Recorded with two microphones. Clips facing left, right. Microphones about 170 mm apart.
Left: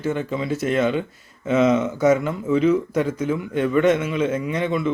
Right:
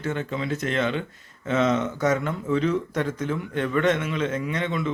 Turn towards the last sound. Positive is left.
turn(degrees=5)  # may be behind; listen again after turning